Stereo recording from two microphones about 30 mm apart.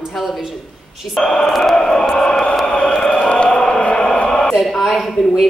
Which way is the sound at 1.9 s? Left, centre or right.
Centre.